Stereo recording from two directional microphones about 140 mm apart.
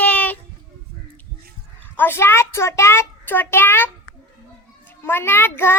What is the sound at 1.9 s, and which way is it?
A child's voice, 15° left (ahead or behind).